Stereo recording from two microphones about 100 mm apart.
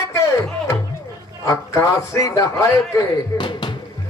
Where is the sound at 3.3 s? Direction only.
55° left (ahead or behind).